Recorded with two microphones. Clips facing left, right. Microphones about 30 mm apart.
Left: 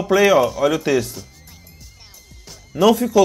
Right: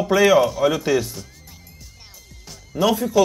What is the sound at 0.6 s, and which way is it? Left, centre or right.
Speech, left.